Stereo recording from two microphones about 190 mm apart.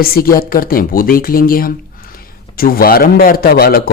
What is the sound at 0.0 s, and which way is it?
Speech, 50° left (ahead or behind).